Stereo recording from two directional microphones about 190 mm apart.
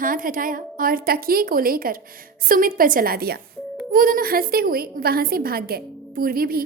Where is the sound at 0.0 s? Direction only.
45° right (ahead or behind).